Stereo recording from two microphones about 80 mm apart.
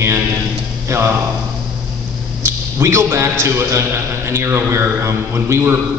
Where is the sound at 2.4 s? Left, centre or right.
Right.